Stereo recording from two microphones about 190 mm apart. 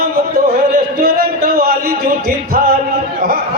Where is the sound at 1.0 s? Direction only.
55° right (ahead or behind).